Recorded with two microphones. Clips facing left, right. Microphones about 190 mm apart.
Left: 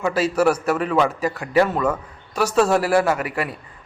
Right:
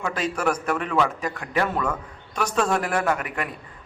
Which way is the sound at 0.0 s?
5° left (ahead or behind).